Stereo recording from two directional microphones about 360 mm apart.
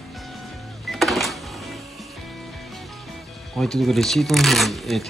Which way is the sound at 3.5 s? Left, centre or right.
Centre.